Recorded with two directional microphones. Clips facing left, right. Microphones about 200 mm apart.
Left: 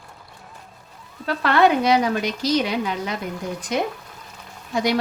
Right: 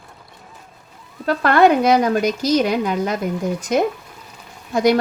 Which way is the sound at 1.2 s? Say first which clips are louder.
Right 4 dB; 45° right (ahead or behind).